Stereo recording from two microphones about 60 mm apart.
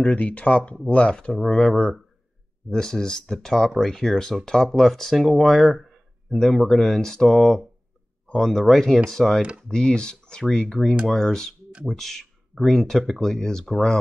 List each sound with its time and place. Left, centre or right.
0.0 s speech: left; by 9.4 s centre
9.4 s speech: centre
9.7 s speech: centre